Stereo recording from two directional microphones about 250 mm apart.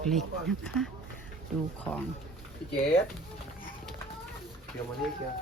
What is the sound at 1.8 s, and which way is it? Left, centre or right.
Speech, centre.